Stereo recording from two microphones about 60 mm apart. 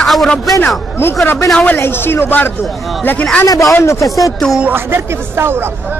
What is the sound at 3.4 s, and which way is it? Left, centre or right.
Speech, left.